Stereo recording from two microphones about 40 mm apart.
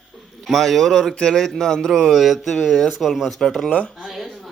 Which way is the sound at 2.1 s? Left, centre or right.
Centre.